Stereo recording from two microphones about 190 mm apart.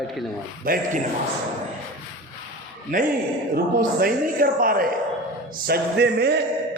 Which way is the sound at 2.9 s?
45° right (ahead or behind).